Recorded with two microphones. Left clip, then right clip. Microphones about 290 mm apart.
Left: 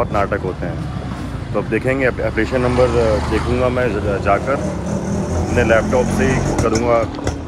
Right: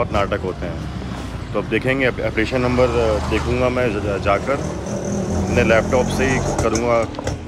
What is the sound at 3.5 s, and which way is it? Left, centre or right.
Speech, centre.